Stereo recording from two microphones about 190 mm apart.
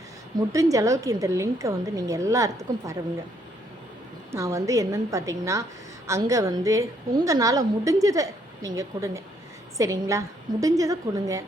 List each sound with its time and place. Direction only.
0.3 s a woman's voice: 15° right (ahead or behind)
4.3 s a woman's voice: 15° right (ahead or behind)